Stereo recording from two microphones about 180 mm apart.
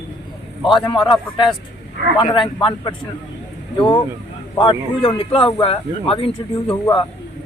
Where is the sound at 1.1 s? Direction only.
25° left (ahead or behind).